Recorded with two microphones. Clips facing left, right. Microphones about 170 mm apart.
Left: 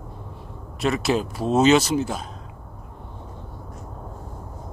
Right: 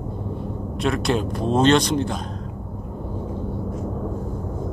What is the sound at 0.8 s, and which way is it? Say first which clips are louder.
A man's voice: even; centre (ahead or behind).